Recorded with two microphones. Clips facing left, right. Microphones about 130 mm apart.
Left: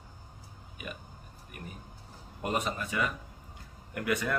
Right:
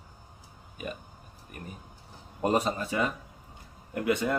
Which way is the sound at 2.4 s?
35° right (ahead or behind).